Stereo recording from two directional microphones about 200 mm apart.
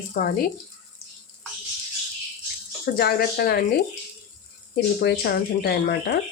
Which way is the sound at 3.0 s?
50° left (ahead or behind).